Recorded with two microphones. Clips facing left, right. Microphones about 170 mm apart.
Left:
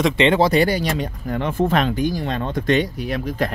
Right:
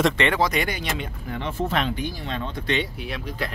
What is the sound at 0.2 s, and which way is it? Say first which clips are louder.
Speech: left 7 dB; 25° left (ahead or behind).